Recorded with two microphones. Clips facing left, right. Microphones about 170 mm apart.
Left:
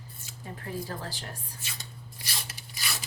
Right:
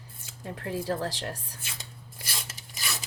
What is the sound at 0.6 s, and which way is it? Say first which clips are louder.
Speech: right 6 dB; 85° right.